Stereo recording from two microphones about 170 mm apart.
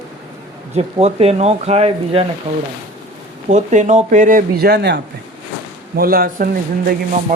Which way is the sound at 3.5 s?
45° right (ahead or behind).